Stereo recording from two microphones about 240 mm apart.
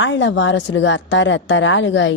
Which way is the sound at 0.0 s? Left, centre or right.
Left.